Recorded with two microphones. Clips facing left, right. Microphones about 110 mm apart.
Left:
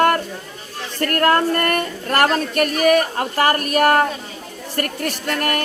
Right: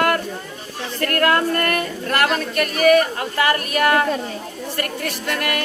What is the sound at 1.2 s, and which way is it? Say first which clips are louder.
A woman's voice: left 2 dB; 35° left (ahead or behind).